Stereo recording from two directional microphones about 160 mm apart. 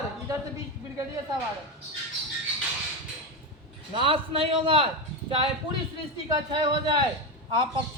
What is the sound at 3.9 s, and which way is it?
Speech, 35° right (ahead or behind).